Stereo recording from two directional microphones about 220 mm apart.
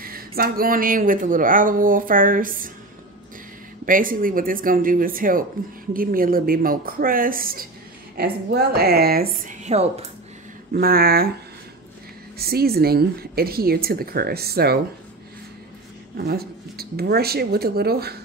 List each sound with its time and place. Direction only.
0.4 s speech: 40° right (ahead or behind)
3.8 s speech: 40° right (ahead or behind)
9.4 s speech: 35° right (ahead or behind)
10.7 s speech: 40° right (ahead or behind)
12.4 s speech: 45° right (ahead or behind)
16.2 s speech: 45° right (ahead or behind)